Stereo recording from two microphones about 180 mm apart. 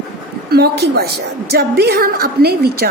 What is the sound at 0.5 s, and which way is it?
A woman's voice, 60° right (ahead or behind).